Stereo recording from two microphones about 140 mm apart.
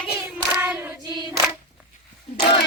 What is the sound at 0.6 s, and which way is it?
Singing, 15° right (ahead or behind).